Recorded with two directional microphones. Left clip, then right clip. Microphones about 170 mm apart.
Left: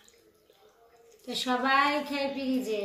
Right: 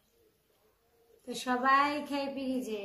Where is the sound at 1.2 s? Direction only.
50° right (ahead or behind).